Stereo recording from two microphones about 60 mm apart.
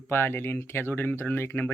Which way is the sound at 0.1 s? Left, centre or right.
Left.